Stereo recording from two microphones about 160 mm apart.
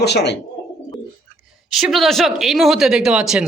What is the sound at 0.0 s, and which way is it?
Speech, 90° left.